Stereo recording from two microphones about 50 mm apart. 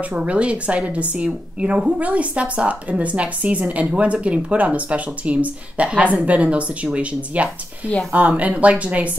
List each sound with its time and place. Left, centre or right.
0.0 s a woman's voice: right